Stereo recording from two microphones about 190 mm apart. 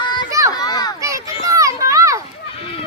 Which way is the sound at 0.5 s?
20° left (ahead or behind).